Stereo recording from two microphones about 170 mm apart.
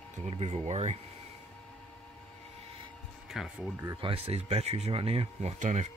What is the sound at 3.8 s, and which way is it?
Speech, 25° right (ahead or behind).